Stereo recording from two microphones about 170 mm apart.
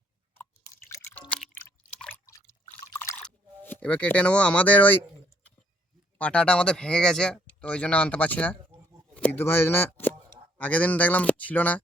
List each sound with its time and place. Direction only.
0.3 s drip: 15° left (ahead or behind)
2.0 s liquid: 10° left (ahead or behind)
3.6 s speech: 10° left (ahead or behind)
6.1 s speech: 5° left (ahead or behind)